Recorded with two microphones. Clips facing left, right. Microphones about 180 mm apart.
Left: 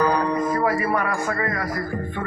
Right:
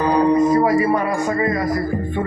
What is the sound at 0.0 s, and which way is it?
Speech, 25° right (ahead or behind).